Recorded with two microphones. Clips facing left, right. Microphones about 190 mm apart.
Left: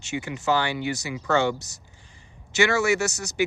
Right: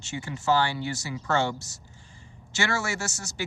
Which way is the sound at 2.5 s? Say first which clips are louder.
Left 8 dB; 20° left (ahead or behind).